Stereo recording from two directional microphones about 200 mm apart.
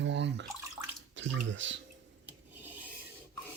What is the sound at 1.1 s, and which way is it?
Speech, 70° right (ahead or behind).